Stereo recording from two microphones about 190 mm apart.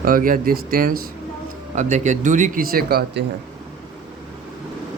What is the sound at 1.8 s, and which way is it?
Speech, 40° right (ahead or behind).